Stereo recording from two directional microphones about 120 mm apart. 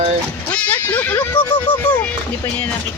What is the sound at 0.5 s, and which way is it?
Speech, 15° left (ahead or behind).